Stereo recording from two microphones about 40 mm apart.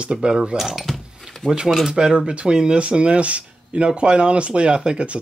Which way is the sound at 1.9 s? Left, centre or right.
Right.